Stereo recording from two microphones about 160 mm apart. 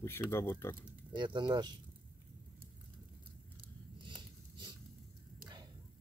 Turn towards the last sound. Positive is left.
turn(degrees=-30)  # may be behind; listen again after turning